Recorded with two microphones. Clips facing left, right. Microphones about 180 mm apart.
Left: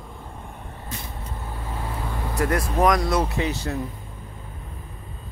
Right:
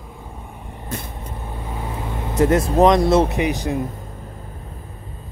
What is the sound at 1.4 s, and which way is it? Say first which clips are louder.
Vehicle: right 3 dB; 20° right (ahead or behind).